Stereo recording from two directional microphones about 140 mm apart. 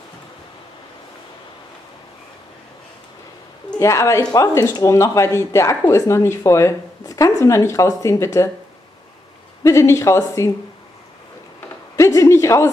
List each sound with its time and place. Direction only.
3.8 s speech: 20° left (ahead or behind)
9.6 s speech: 20° left (ahead or behind)
12.0 s speech: 20° left (ahead or behind)